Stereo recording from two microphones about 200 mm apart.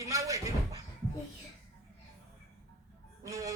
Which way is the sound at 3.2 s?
15° right (ahead or behind).